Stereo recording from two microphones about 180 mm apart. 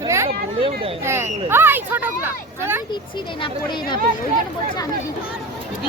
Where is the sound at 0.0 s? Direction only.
15° right (ahead or behind).